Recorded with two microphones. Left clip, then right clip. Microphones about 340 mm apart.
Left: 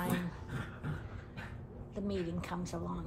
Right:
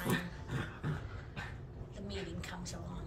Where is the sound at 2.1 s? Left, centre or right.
Centre.